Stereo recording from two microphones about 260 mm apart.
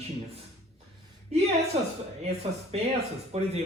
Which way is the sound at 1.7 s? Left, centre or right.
Right.